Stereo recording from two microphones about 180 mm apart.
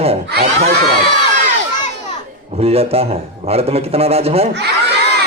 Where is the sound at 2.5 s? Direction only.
35° right (ahead or behind).